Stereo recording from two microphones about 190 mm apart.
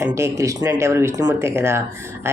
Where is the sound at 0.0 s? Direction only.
15° right (ahead or behind).